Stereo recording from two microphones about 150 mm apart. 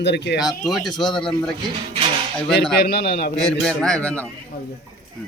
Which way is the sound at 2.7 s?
90° left.